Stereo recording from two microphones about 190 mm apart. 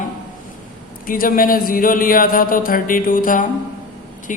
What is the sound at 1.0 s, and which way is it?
A man's voice, 50° left (ahead or behind).